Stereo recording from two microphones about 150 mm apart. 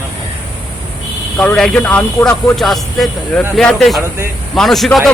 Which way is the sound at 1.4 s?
5° left (ahead or behind).